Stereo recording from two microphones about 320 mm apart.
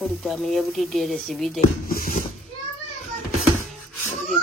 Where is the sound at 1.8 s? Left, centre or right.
Left.